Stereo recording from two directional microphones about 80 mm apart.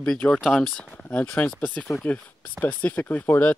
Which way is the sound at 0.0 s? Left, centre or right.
Centre.